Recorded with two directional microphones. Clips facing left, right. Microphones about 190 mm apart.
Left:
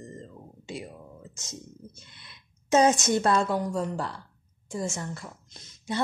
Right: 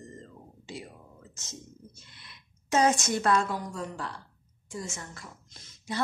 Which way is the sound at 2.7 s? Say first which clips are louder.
Left 4 dB; 20° left (ahead or behind).